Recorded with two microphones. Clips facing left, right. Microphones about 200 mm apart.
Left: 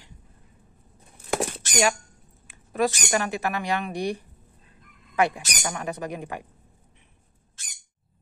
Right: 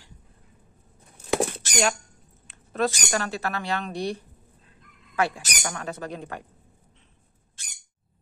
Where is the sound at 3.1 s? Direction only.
15° left (ahead or behind).